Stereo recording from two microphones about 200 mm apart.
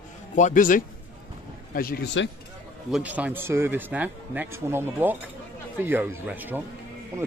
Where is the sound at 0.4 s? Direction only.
40° left (ahead or behind).